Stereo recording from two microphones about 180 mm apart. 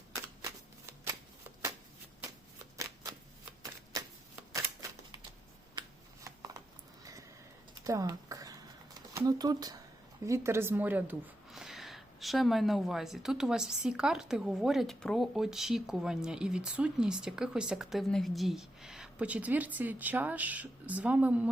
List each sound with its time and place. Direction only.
2.7 s shuffling cards: 20° right (ahead or behind)
3.6 s typewriter: 20° right (ahead or behind)
6.2 s a sound: 15° right (ahead or behind)
9.1 s speech: 20° right (ahead or behind)